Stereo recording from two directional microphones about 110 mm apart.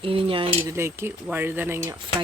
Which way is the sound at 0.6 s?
25° right (ahead or behind).